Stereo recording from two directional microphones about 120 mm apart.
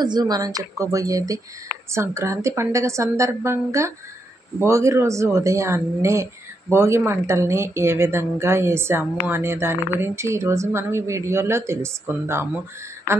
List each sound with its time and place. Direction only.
0.0 s speech: 35° right (ahead or behind)